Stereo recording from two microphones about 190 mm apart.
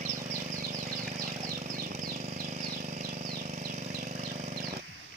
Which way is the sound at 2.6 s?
45° right (ahead or behind).